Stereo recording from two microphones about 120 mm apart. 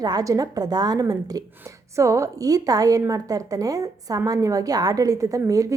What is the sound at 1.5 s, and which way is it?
A woman's voice, 20° right (ahead or behind).